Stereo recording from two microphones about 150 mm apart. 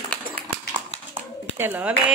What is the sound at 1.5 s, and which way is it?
Speech, 10° right (ahead or behind).